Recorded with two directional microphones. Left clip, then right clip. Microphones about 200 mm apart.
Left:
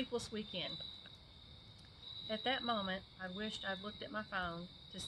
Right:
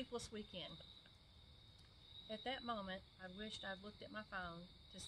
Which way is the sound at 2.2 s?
15° right (ahead or behind).